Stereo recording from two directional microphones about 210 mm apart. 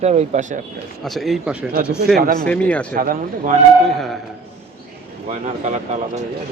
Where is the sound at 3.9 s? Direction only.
Centre (ahead or behind).